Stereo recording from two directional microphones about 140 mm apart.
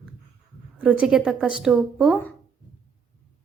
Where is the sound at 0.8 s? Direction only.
5° right (ahead or behind).